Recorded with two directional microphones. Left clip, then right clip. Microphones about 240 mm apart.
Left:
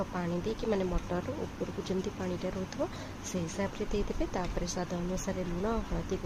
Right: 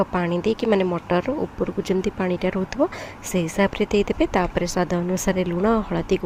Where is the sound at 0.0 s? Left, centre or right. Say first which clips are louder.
Right 13 dB; right.